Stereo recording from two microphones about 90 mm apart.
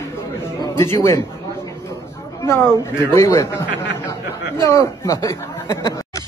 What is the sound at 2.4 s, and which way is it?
A woman's voice, 30° left (ahead or behind).